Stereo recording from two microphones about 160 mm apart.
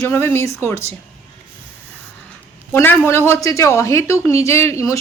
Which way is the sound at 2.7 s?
15° left (ahead or behind).